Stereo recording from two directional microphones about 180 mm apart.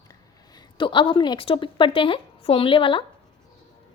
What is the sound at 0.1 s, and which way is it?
A woman's voice, 25° left (ahead or behind).